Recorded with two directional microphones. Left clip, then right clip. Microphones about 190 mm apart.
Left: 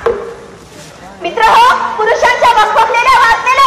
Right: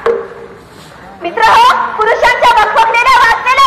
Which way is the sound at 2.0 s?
25° right (ahead or behind).